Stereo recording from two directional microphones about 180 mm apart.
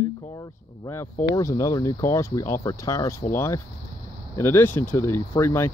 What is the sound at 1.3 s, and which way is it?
Speech, 15° left (ahead or behind).